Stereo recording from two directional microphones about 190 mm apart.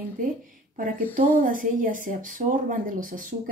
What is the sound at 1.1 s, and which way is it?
A woman's voice, 45° right (ahead or behind).